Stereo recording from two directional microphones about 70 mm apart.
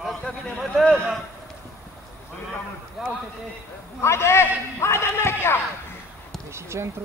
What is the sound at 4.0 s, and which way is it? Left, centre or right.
A man's voice, left.